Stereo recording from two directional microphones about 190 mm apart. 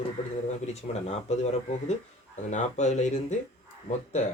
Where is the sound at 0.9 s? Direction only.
35° left (ahead or behind).